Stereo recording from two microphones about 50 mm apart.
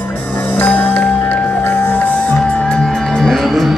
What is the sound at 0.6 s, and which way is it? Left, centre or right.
Music, left.